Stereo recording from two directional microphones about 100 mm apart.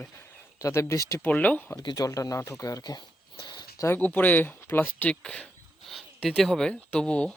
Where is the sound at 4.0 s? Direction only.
15° left (ahead or behind).